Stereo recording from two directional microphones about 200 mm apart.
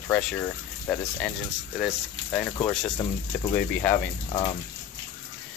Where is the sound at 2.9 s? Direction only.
25° left (ahead or behind).